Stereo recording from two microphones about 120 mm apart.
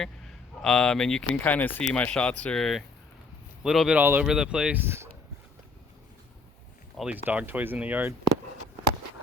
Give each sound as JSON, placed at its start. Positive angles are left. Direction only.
{"t": 0.6, "sound": "speech", "side_deg": 5}
{"t": 4.0, "sound": "speech", "side_deg": -15}
{"t": 4.3, "sound": "speech", "side_deg": -5}
{"t": 4.8, "sound": "speech", "side_deg": -20}
{"t": 6.9, "sound": "speech", "side_deg": -5}
{"t": 7.3, "sound": "speech", "side_deg": -15}